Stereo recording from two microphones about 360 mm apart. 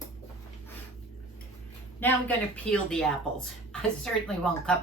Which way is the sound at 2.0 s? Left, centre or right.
Centre.